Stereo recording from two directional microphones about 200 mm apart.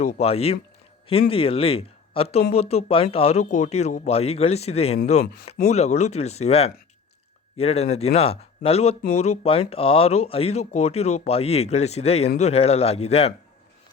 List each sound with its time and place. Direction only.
0.0 s speech: 35° left (ahead or behind)
5.2 s speech: 50° left (ahead or behind)
5.6 s speech: 35° left (ahead or behind)